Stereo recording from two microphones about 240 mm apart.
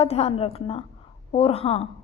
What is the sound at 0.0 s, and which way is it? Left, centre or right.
A woman's voice, left.